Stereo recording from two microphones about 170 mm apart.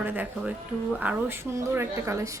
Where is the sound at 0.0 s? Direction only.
10° right (ahead or behind).